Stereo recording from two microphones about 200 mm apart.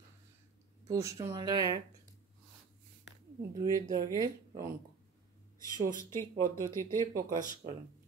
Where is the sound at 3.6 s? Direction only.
20° right (ahead or behind).